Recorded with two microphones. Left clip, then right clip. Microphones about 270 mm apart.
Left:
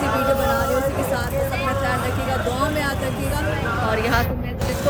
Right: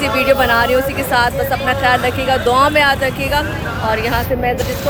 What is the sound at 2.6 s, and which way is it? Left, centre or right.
Speech, centre.